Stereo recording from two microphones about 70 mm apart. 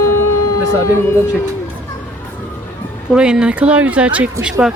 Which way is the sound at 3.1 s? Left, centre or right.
Centre.